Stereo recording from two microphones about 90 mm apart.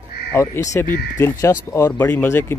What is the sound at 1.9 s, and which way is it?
Speech, 20° left (ahead or behind).